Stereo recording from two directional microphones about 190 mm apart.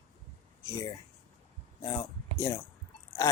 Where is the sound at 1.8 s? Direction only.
20° left (ahead or behind).